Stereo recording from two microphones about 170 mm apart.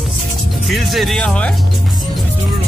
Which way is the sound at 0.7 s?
Centre (ahead or behind).